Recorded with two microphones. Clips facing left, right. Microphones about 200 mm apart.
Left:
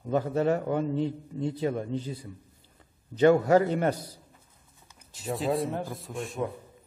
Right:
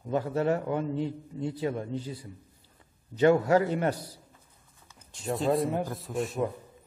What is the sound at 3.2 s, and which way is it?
Speech, 40° left (ahead or behind).